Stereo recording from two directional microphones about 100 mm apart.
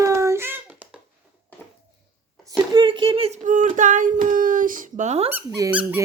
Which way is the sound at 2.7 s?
50° right (ahead or behind).